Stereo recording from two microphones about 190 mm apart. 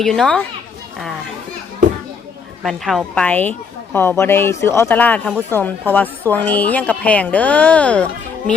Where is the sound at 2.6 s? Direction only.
Centre (ahead or behind).